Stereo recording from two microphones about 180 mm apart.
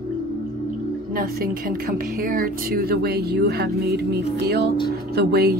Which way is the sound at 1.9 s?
55° right (ahead or behind).